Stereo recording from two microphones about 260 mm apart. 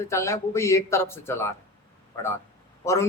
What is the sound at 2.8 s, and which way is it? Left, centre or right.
Speech, centre.